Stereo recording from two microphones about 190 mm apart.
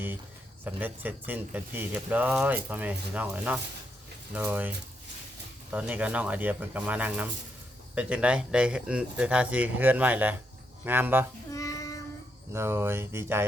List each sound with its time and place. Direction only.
0.6 s speech: 10° right (ahead or behind)
5.7 s speech: 10° right (ahead or behind)
11.5 s child singing: 15° left (ahead or behind)
12.5 s speech: 10° right (ahead or behind)